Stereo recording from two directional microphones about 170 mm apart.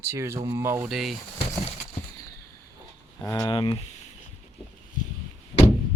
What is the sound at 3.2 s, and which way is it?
Speech, 20° left (ahead or behind).